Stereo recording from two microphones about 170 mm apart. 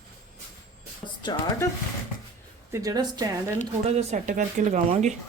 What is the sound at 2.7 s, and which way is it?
Speech, 20° right (ahead or behind).